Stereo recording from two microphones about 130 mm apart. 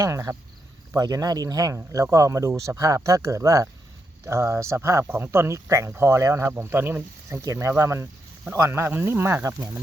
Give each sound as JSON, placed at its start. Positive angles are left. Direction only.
{"t": 0.0, "sound": "speech", "side_deg": -20}